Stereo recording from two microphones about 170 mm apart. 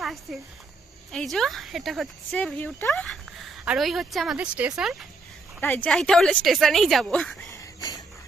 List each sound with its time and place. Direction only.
0.0 s speech: centre (ahead or behind)
5.5 s speech: 10° left (ahead or behind)
7.5 s a sound: 20° left (ahead or behind)